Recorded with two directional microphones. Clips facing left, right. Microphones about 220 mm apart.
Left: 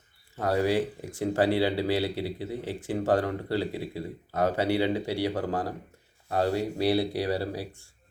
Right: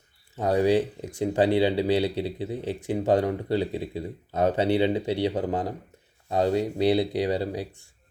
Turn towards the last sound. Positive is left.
turn(degrees=-20)  # may be behind; listen again after turning